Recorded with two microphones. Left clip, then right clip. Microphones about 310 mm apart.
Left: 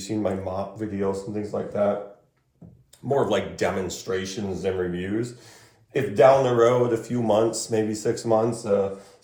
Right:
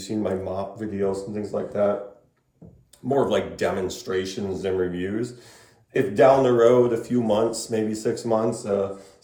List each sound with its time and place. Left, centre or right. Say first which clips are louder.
0.0 s speech: even; centre
3.1 s speech: right 1 dB; centre